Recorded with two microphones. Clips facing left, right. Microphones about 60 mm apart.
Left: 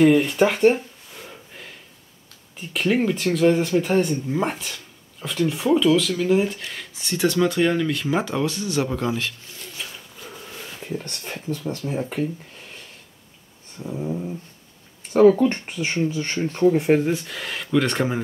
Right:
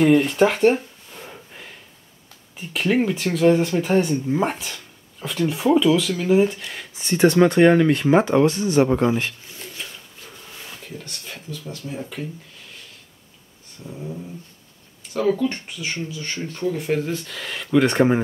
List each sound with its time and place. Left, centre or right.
0.0 s speech: centre
1.2 s a sound: centre
2.5 s speech: centre
7.0 s speech: right
10.9 s speech: left
11.8 s a sound: left
13.7 s a sound: left
15.1 s speech: left
17.1 s speech: centre
17.6 s speech: centre